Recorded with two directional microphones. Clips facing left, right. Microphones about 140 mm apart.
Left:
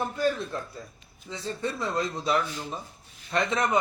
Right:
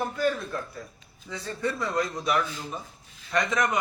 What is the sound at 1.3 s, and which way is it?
Speech, 25° left (ahead or behind).